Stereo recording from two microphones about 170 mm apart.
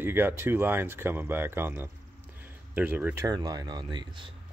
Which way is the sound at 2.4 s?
10° right (ahead or behind).